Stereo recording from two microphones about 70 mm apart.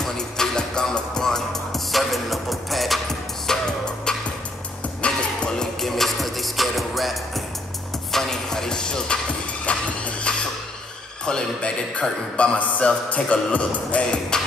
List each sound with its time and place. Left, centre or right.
0.0 s music: centre
5.8 s music: centre
9.7 s a sound: centre
11.2 s a man's voice: centre